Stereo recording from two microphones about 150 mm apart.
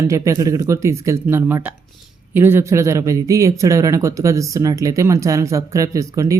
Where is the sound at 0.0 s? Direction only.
20° right (ahead or behind).